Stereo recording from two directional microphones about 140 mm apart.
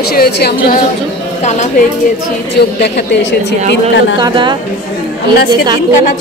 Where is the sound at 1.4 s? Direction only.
55° left (ahead or behind).